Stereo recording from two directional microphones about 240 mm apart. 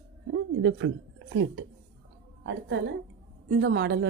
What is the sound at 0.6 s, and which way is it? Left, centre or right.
Speech, right.